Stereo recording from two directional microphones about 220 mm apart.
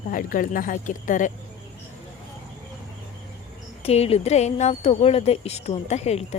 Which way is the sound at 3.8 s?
30° left (ahead or behind).